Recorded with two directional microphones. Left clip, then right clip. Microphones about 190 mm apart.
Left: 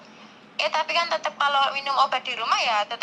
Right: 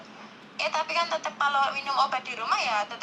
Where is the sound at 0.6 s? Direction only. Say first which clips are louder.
Left 3 dB; 30° left (ahead or behind).